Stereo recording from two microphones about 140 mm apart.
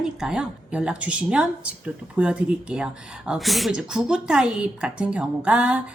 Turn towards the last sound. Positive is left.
turn(degrees=-10)  # may be behind; listen again after turning